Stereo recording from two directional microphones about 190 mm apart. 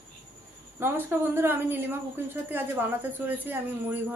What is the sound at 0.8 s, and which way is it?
A woman's voice, 10° right (ahead or behind).